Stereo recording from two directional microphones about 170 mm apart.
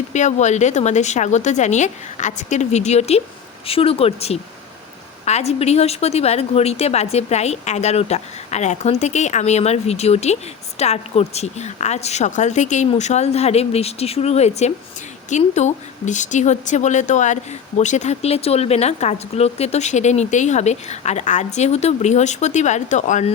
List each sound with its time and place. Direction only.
0.1 s a woman's voice: 45° left (ahead or behind)